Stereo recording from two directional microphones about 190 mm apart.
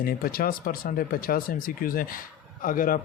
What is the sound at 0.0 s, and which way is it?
Speech, 50° left (ahead or behind).